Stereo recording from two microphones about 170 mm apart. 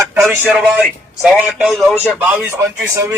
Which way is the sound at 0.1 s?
Centre (ahead or behind).